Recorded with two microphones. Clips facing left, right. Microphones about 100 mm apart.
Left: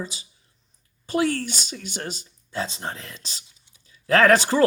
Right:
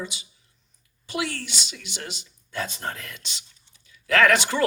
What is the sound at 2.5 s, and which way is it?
A man's voice, 25° left (ahead or behind).